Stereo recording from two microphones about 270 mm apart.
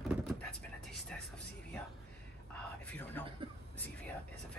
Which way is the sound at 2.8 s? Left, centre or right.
Centre.